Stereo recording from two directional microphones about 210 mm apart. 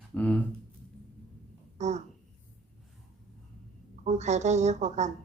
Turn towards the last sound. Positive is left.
turn(degrees=-35)  # may be behind; listen again after turning